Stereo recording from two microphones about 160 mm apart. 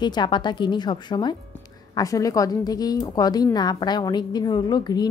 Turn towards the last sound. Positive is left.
turn(degrees=25)  # may be behind; listen again after turning